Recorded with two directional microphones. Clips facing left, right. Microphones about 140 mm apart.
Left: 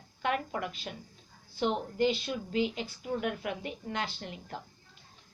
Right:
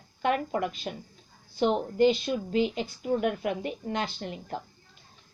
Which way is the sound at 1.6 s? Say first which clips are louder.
Right 6 dB; 20° right (ahead or behind).